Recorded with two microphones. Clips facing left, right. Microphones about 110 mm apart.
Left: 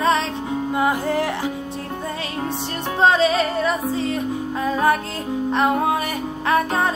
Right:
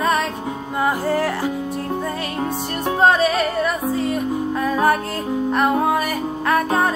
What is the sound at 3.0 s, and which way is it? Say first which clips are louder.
Music: even; 50° right (ahead or behind).